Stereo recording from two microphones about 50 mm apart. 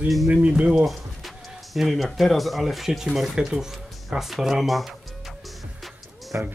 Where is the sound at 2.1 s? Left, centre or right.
Centre.